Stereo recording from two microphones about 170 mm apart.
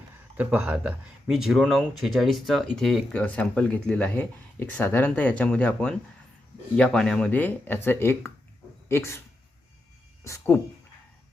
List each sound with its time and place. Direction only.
0.3 s speech: 10° right (ahead or behind); by 9.2 s 15° left (ahead or behind)
10.2 s speech: 15° left (ahead or behind)